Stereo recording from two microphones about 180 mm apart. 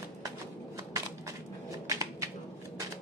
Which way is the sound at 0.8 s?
15° right (ahead or behind).